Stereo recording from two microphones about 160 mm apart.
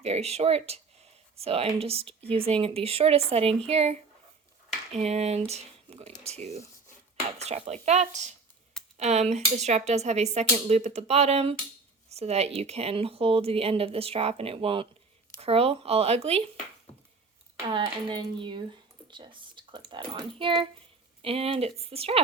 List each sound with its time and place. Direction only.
0.0 s speech: 40° right (ahead or behind)
4.9 s speech: 40° right (ahead or behind)
17.7 s speech: 30° right (ahead or behind)